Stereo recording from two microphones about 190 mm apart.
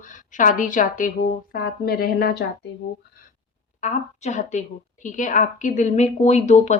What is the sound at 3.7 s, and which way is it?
A woman's voice, 40° left (ahead or behind).